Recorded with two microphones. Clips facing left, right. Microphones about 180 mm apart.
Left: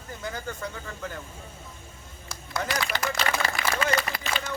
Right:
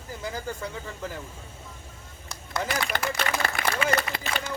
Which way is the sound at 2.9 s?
55° right (ahead or behind).